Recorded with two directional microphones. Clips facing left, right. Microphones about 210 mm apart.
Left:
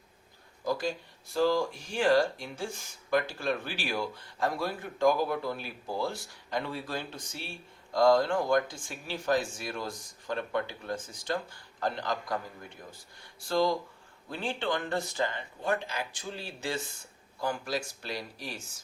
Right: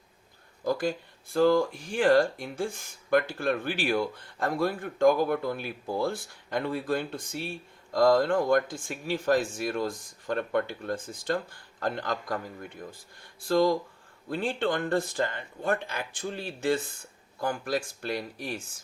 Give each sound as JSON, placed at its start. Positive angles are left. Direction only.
{"t": 0.6, "sound": "speech", "side_deg": -55}
{"t": 13.4, "sound": "speech", "side_deg": -55}